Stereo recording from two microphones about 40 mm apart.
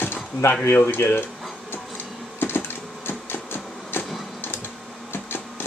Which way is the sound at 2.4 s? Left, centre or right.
Left.